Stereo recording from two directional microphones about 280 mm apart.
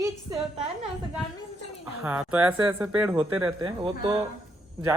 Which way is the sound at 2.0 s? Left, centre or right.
Centre.